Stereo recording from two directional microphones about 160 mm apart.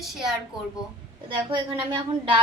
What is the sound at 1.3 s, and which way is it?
A woman's voice, 30° right (ahead or behind).